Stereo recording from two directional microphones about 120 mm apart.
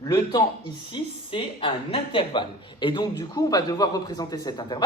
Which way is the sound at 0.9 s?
45° left (ahead or behind).